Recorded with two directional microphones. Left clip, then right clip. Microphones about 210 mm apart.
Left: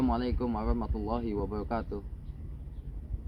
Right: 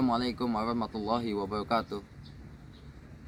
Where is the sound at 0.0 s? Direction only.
15° right (ahead or behind).